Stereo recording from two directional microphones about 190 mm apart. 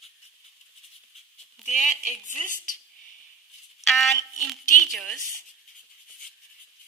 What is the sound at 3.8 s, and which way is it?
A woman's voice, centre (ahead or behind).